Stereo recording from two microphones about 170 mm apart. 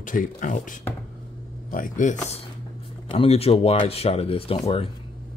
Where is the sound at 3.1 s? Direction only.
35° left (ahead or behind).